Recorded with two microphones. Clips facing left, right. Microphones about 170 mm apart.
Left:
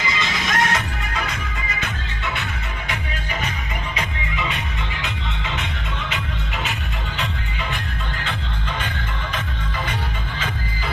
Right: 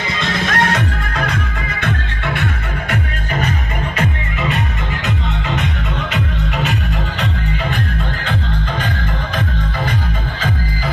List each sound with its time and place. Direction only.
0.0 s music: 60° right (ahead or behind)
3.9 s music: 50° right (ahead or behind)